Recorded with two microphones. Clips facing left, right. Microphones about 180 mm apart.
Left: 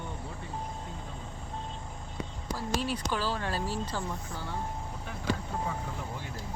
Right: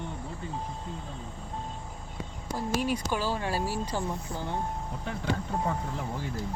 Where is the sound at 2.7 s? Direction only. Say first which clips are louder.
Right 3 dB; 10° right (ahead or behind).